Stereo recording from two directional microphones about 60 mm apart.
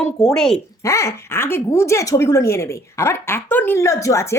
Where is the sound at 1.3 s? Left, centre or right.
Left.